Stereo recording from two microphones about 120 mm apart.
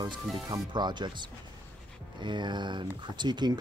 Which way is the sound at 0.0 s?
40° right (ahead or behind).